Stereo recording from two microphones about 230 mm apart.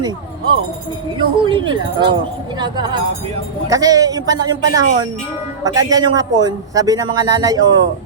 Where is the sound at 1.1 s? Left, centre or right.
Right.